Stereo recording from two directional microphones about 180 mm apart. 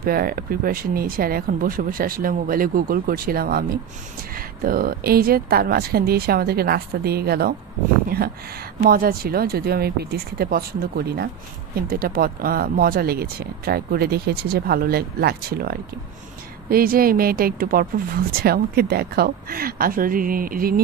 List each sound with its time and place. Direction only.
0.0 s a woman's voice: 55° right (ahead or behind)
8.8 s a woman's voice: 55° right (ahead or behind)